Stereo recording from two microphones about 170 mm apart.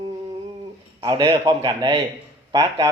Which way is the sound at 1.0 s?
25° right (ahead or behind).